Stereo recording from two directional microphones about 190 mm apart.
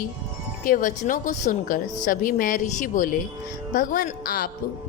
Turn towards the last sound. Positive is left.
turn(degrees=50)  # may be behind; listen again after turning